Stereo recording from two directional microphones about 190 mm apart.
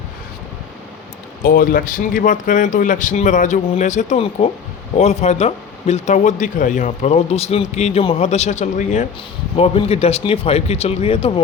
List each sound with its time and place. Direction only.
1.5 s speech: 50° left (ahead or behind); by 11.4 s 30° left (ahead or behind)